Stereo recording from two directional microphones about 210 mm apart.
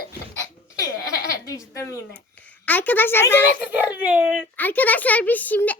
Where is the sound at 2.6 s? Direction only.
10° left (ahead or behind).